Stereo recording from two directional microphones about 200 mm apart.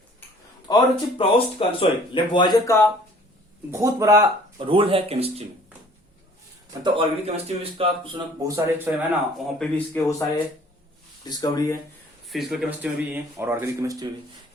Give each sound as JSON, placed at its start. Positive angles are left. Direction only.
{"t": 0.7, "sound": "speech", "side_deg": 20}
{"t": 3.7, "sound": "speech", "side_deg": -15}
{"t": 4.5, "sound": "a man's voice", "side_deg": -25}
{"t": 6.8, "sound": "a man's voice", "side_deg": -25}
{"t": 9.6, "sound": "a man's voice", "side_deg": 10}
{"t": 12.3, "sound": "speech", "side_deg": 0}